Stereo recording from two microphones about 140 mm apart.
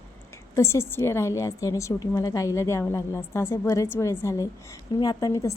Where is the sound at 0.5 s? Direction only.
20° left (ahead or behind).